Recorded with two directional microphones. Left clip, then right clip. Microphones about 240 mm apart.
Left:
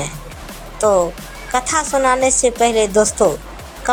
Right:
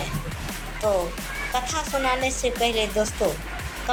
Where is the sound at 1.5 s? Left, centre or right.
Left.